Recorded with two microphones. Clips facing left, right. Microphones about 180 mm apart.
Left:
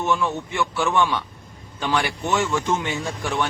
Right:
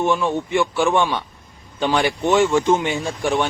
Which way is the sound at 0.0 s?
20° right (ahead or behind).